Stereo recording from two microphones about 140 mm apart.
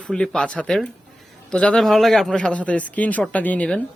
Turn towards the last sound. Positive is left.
turn(degrees=10)  # may be behind; listen again after turning